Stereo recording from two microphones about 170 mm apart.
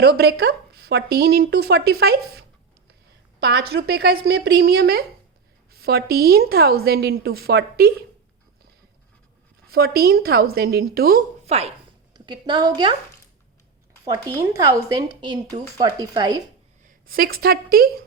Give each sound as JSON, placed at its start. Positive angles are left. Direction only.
{"t": 0.0, "sound": "speech", "side_deg": -70}
{"t": 3.4, "sound": "a woman's voice", "side_deg": -70}
{"t": 9.6, "sound": "a woman's voice", "side_deg": -65}
{"t": 11.4, "sound": "speech", "side_deg": -40}
{"t": 12.1, "sound": "a woman's voice", "side_deg": -25}
{"t": 14.0, "sound": "a woman's voice", "side_deg": -15}
{"t": 17.1, "sound": "a woman's voice", "side_deg": -60}